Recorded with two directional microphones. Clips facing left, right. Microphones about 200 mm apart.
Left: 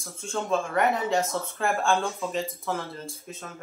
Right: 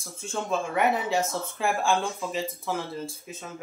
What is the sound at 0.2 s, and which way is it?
Speech, 5° right (ahead or behind).